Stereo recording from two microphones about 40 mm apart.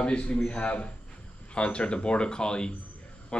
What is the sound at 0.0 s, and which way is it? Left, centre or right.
A man's voice, left.